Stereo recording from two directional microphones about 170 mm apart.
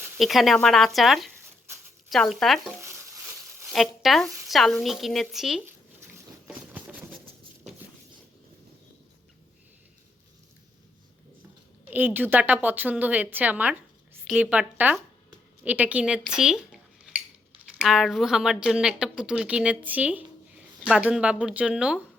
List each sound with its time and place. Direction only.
0.2 s speech: centre (ahead or behind)
2.8 s a sound: 15° right (ahead or behind)
3.7 s speech: centre (ahead or behind)
11.9 s a woman's voice: 10° right (ahead or behind)